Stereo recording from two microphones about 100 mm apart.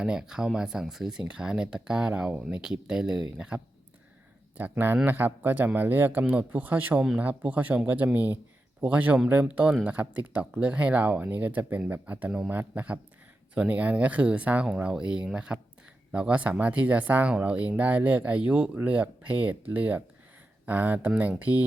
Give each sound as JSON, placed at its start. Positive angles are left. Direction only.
{"t": 0.0, "sound": "speech", "side_deg": -5}